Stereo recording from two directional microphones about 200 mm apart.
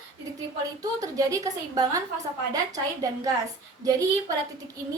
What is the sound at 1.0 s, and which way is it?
A woman's voice, 15° right (ahead or behind).